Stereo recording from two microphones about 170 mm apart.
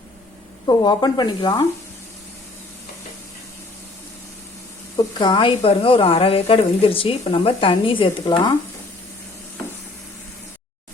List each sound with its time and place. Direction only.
0.7 s speech: 25° left (ahead or behind)
4.9 s speech: 25° left (ahead or behind)